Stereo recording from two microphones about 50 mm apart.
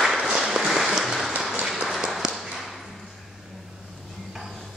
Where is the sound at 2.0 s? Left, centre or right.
Centre.